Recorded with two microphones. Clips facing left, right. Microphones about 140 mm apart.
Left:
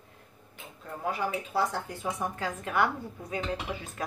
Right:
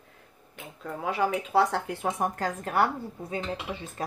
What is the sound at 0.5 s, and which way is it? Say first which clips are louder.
Speech: right 5 dB; 80° right.